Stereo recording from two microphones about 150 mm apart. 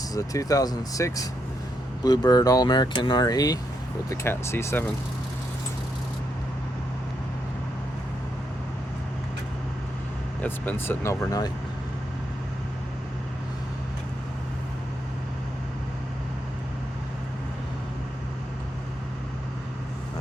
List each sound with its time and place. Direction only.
0.1 s speech: 25° left (ahead or behind)
10.4 s speech: 15° left (ahead or behind)